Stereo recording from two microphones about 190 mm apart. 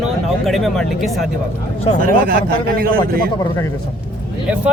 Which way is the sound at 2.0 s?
50° right (ahead or behind).